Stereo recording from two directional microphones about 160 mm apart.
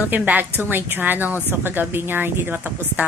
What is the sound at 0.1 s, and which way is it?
A woman's voice, 10° right (ahead or behind).